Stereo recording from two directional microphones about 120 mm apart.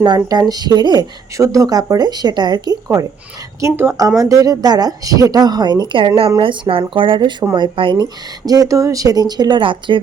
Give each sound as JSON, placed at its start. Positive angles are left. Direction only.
{"t": 0.0, "sound": "a woman's voice", "side_deg": -35}
{"t": 6.4, "sound": "speech", "side_deg": -50}